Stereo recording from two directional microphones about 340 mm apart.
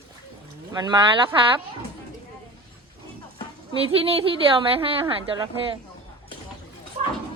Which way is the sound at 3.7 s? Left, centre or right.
Centre.